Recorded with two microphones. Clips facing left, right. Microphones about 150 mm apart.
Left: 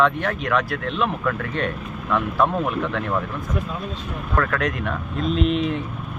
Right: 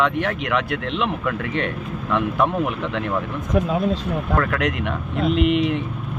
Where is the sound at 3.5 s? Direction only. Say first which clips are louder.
Right 12 dB; 90° right.